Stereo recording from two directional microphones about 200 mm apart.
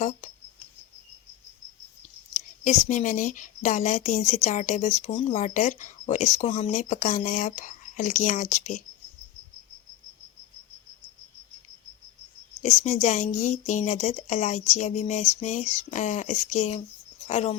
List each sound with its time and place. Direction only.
2.6 s a woman's voice: 35° left (ahead or behind)
12.6 s a woman's voice: 35° left (ahead or behind)